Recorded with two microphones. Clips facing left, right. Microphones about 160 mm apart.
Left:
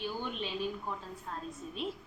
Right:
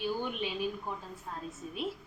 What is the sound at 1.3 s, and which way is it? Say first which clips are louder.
Speech: even; 10° right (ahead or behind).